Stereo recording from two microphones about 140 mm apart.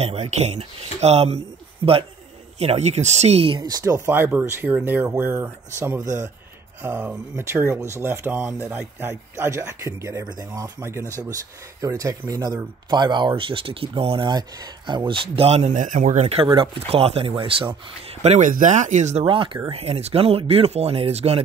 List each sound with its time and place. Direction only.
0.0 s speech: 50° right (ahead or behind)
2.6 s speech: 50° right (ahead or behind)
16.4 s speech: 40° right (ahead or behind)
18.2 s speech: 50° right (ahead or behind)
18.5 s speech: 60° right (ahead or behind)
19.2 s speech: 35° right (ahead or behind)